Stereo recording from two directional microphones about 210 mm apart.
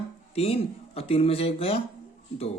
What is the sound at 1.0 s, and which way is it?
Speech, 30° left (ahead or behind).